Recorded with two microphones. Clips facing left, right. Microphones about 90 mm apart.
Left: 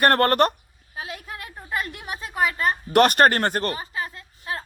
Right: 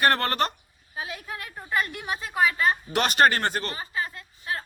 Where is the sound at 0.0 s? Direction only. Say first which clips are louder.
Left 5 dB; 55° left (ahead or behind).